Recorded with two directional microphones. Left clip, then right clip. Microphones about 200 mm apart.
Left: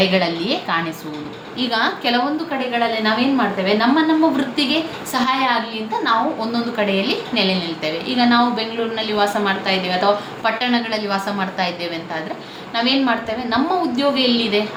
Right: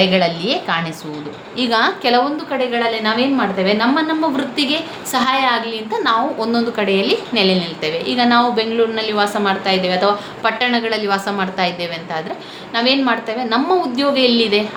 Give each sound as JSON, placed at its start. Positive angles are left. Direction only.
{"t": 0.1, "sound": "a woman's voice", "side_deg": -40}